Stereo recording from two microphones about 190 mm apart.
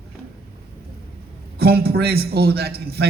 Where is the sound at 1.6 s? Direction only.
55° right (ahead or behind).